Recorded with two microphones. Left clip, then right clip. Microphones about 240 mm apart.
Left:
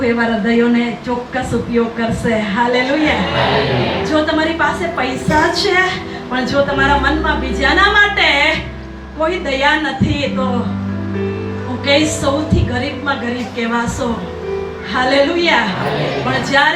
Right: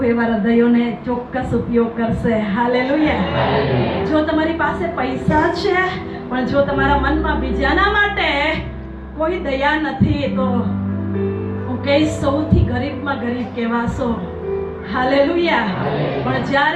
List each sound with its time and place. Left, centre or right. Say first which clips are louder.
0.0 s a woman's voice: left 2 dB; centre
11.9 s a woman's voice: left 3 dB; centre
14.9 s a woman's voice: left 2 dB; centre